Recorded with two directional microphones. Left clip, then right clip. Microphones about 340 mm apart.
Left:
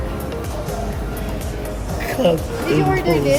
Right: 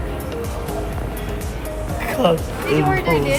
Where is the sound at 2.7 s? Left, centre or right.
Centre.